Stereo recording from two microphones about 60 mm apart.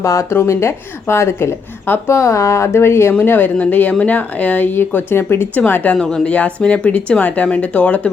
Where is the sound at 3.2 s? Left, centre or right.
Left.